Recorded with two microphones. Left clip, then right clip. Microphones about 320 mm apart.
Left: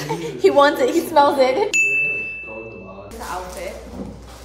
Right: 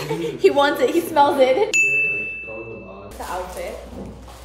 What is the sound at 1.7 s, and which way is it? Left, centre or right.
Ding, centre.